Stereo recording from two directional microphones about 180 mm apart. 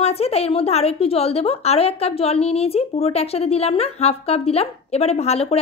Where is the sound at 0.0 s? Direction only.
35° left (ahead or behind).